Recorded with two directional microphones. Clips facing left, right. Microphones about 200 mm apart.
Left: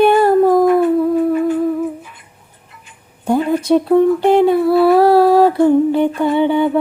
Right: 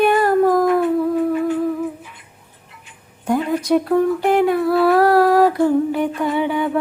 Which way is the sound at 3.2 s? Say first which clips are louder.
Left 4 dB; 30° left (ahead or behind).